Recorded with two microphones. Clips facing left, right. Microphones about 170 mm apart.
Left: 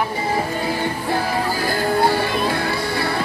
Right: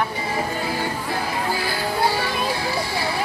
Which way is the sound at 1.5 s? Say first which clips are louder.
Left 5 dB; 50° left (ahead or behind).